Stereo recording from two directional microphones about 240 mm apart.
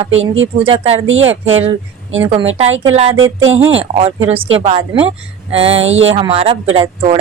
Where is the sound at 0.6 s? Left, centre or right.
Right.